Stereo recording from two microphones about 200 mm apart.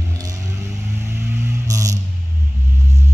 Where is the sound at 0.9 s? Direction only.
10° right (ahead or behind).